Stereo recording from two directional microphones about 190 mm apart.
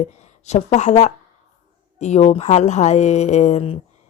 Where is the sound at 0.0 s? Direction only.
35° left (ahead or behind).